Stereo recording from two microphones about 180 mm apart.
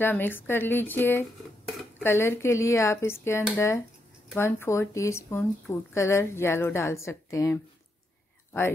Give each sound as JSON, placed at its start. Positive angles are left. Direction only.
{"t": 0.0, "sound": "speech", "side_deg": 10}